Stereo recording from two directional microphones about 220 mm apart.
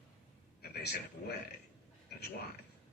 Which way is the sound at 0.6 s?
45° left (ahead or behind).